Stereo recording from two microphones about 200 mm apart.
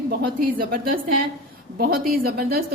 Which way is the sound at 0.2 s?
45° right (ahead or behind).